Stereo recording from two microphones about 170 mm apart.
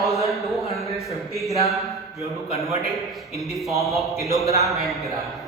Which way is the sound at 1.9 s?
20° right (ahead or behind).